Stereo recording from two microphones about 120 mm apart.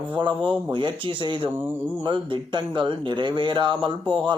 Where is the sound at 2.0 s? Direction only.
40° right (ahead or behind).